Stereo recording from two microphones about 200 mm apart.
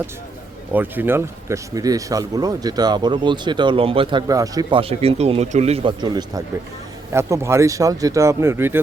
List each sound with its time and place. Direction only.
0.7 s speech: 10° right (ahead or behind)